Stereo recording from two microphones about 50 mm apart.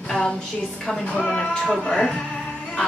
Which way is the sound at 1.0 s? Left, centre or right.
Left.